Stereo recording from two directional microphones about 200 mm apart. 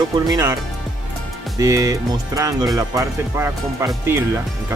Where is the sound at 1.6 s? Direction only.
15° right (ahead or behind).